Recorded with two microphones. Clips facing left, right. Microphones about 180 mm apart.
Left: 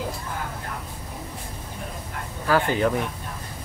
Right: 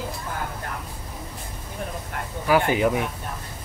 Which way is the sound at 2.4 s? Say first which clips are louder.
Right 1 dB; 15° right (ahead or behind).